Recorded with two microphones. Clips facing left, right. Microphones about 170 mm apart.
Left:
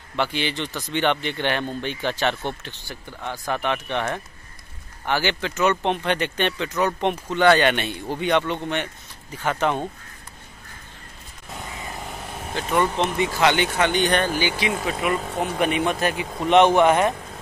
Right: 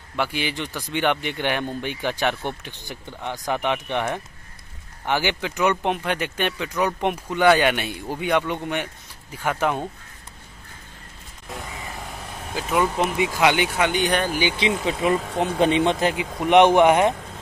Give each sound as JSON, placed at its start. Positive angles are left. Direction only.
{"t": 0.1, "sound": "speech", "side_deg": -10}
{"t": 12.5, "sound": "speech", "side_deg": -5}
{"t": 14.6, "sound": "speech", "side_deg": -25}